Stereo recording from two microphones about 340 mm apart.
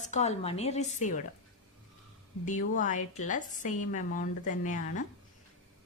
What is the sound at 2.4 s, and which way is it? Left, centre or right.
Speech, left.